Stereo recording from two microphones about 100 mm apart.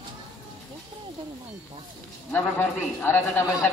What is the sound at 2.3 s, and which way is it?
A man's voice, 20° left (ahead or behind).